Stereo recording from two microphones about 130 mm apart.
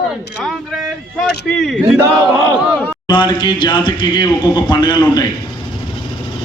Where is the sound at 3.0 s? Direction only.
35° left (ahead or behind).